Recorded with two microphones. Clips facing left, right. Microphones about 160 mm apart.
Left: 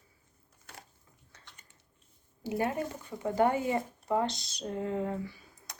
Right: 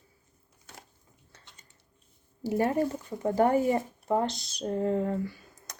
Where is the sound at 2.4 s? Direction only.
40° right (ahead or behind).